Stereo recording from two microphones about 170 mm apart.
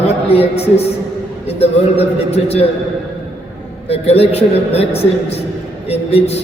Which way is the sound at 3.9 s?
35° left (ahead or behind).